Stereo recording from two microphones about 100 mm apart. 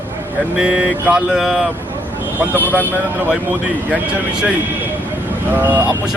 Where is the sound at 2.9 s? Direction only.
15° right (ahead or behind).